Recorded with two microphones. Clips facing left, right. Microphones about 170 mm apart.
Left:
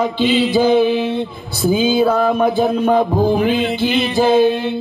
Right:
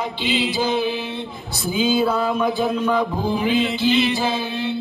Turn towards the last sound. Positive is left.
turn(degrees=50)  # may be behind; listen again after turning